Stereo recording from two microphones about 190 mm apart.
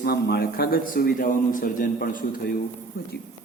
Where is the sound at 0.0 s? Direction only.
55° left (ahead or behind).